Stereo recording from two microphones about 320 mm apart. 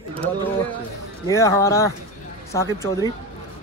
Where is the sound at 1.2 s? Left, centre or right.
Centre.